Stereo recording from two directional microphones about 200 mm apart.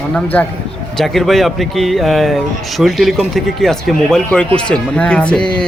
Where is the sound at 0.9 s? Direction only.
Centre (ahead or behind).